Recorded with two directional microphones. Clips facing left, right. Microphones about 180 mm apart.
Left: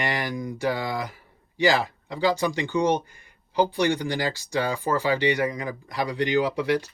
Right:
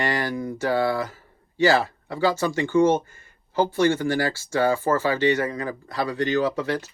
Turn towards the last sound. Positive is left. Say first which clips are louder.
# left 1 dB
turn(degrees=15)  # may be behind; listen again after turning